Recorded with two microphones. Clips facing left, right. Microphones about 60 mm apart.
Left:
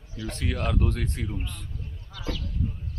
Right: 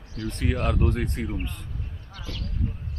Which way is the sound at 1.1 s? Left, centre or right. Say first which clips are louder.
Right 3 dB; right.